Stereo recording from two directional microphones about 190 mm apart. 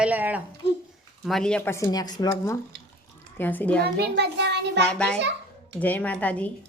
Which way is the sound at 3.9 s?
65° right (ahead or behind).